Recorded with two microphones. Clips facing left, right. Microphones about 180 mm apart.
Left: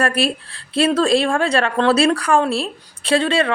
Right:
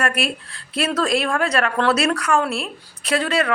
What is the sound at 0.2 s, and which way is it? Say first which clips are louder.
A woman's voice: left 5 dB; 30° left (ahead or behind).